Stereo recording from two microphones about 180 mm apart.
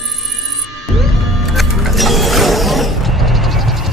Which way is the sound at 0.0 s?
Centre (ahead or behind).